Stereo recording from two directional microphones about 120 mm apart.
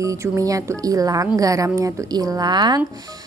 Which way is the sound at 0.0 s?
25° right (ahead or behind).